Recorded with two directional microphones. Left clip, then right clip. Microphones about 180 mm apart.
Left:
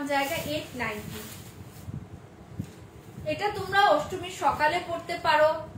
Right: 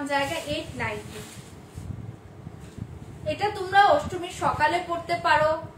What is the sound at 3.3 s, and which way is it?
A woman's voice, 10° right (ahead or behind).